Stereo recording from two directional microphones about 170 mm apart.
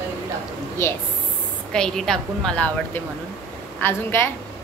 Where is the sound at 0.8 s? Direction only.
15° left (ahead or behind).